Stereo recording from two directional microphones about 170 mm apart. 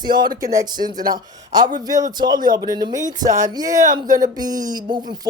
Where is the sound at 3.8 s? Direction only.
50° right (ahead or behind).